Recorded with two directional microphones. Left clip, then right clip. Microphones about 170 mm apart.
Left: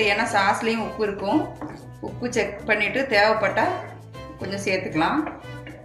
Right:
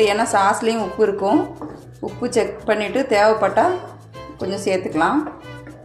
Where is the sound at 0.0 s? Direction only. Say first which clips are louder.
Right 4 dB; 45° right (ahead or behind).